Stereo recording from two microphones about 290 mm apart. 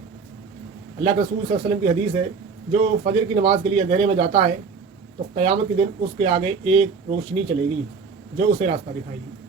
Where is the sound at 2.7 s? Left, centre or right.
Centre.